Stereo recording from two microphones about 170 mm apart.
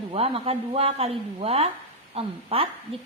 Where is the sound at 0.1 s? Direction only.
35° right (ahead or behind).